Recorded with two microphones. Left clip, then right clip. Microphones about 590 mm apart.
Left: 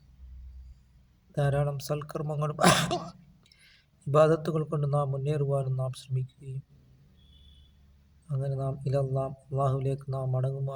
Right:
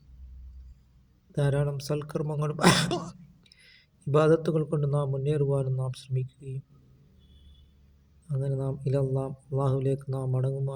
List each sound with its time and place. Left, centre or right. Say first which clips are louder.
1.3 s speech: even; left
8.3 s speech: right 1 dB; left